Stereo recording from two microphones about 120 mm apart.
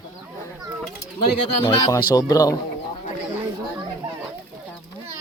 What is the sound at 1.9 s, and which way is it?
Speech, 35° left (ahead or behind).